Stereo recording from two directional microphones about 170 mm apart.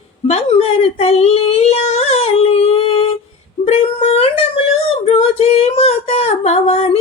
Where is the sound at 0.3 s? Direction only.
35° left (ahead or behind).